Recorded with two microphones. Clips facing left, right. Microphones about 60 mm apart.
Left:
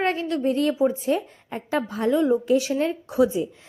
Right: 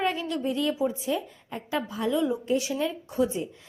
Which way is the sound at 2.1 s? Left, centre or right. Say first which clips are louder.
Left 6 dB; left.